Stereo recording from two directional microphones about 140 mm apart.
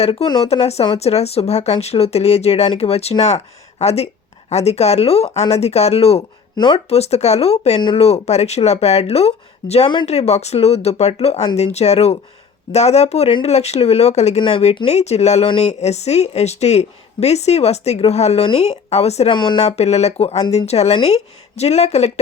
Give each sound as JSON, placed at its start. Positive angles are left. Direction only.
{"t": 0.0, "sound": "speech", "side_deg": 45}
{"t": 6.9, "sound": "speech", "side_deg": 50}
{"t": 19.3, "sound": "speech", "side_deg": 35}
{"t": 19.5, "sound": "speech", "side_deg": 50}